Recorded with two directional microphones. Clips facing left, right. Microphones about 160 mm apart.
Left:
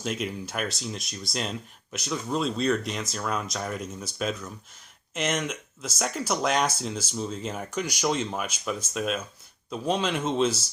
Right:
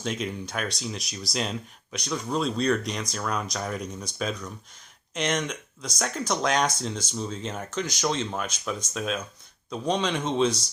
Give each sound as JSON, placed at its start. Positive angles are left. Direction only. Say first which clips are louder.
{"t": 0.0, "sound": "speech", "louder": "even", "side_deg": 5}